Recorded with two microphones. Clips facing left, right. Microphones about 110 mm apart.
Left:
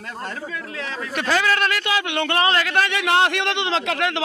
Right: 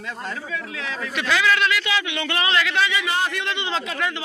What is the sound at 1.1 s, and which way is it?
A man's voice, 40° left (ahead or behind).